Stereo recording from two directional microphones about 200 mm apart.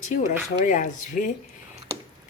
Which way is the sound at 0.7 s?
40° left (ahead or behind).